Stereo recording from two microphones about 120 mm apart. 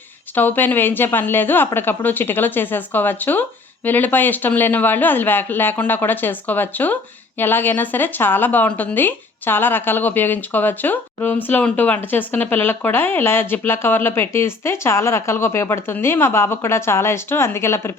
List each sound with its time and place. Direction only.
0.3 s speech: 15° left (ahead or behind)